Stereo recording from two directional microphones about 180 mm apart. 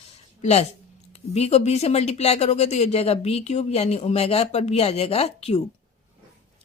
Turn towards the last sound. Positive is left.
turn(degrees=35)  # may be behind; listen again after turning